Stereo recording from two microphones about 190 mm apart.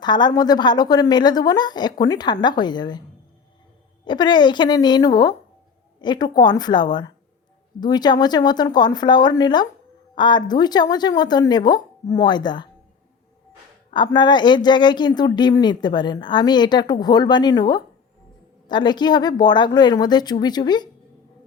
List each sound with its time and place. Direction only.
0.0 s speech: 20° left (ahead or behind)
4.0 s speech: 25° left (ahead or behind)
13.9 s speech: 25° left (ahead or behind)